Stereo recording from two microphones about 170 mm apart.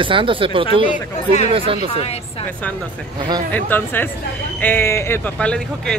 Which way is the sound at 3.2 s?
25° right (ahead or behind).